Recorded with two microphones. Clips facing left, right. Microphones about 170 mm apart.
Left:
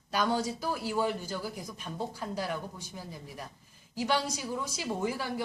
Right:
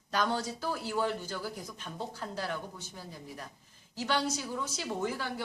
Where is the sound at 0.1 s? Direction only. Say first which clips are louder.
Left 2 dB; 10° left (ahead or behind).